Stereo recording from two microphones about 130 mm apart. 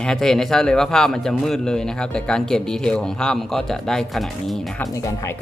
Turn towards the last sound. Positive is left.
turn(degrees=25)  # may be behind; listen again after turning